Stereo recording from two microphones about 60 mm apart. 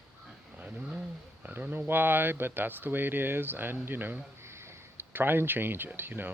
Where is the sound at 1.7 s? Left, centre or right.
Right.